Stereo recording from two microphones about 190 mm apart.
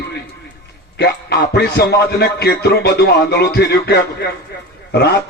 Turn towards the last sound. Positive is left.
turn(degrees=60)  # may be behind; listen again after turning